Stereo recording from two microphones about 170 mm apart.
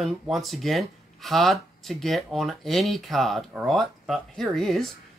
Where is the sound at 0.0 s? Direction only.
Centre (ahead or behind).